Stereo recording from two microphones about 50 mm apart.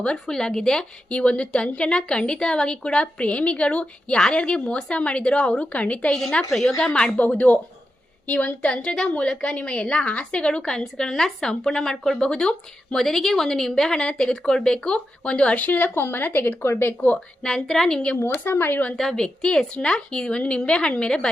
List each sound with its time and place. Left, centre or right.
0.3 s a woman's voice: centre; by 6.1 s left
6.5 s a woman's voice: centre
6.8 s a woman's voice: centre
7.2 s a woman's voice: left
8.7 s a woman's voice: centre
13.0 s a woman's voice: centre; by 17.2 s left
17.4 s a woman's voice: centre
18.3 s speech: left
18.9 s a woman's voice: centre